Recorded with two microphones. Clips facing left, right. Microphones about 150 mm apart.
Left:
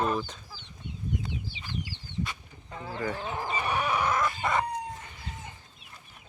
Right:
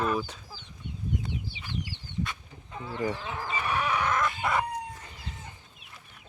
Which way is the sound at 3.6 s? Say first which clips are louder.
Even; 15° left (ahead or behind).